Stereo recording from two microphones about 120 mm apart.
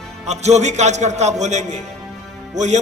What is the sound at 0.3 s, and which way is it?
A man's voice, 70° right (ahead or behind).